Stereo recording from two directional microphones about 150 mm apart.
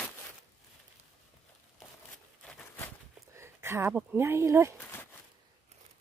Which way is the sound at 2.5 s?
10° left (ahead or behind).